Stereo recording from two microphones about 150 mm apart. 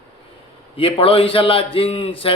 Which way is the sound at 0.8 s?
40° left (ahead or behind).